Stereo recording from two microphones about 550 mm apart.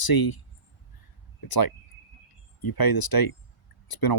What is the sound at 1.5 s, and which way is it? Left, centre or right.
Speech, left.